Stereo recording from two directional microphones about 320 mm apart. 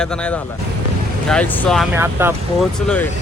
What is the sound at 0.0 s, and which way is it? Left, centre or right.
Speech, centre.